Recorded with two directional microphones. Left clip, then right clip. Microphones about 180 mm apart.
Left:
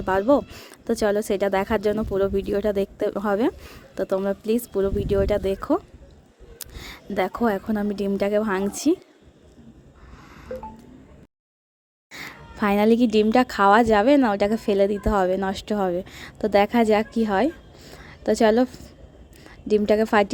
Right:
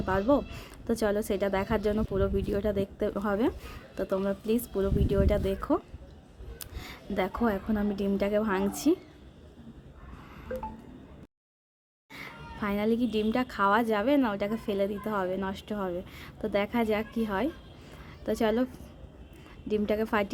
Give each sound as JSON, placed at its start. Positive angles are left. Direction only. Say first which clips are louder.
{"t": 0.0, "sound": "a woman's voice", "louder": "left 7 dB", "side_deg": 40}
{"t": 0.4, "sound": "a woman's voice", "louder": "left 6 dB", "side_deg": 25}
{"t": 12.1, "sound": "a woman's voice", "louder": "left 5 dB", "side_deg": 35}
{"t": 17.8, "sound": "a sound", "louder": "left 9 dB", "side_deg": 30}
{"t": 19.5, "sound": "a woman's voice", "louder": "left 9 dB", "side_deg": 30}